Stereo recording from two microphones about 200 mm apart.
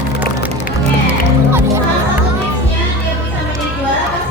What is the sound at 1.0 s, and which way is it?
Music, 10° right (ahead or behind).